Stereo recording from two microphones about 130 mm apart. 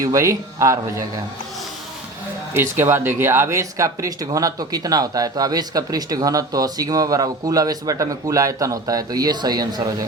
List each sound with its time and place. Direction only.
0.0 s speech: 25° right (ahead or behind)
2.5 s speech: 20° right (ahead or behind)